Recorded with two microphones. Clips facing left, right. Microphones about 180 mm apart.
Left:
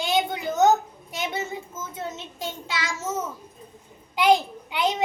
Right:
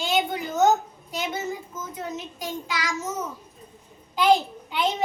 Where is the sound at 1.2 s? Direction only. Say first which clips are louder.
Even; 25° left (ahead or behind).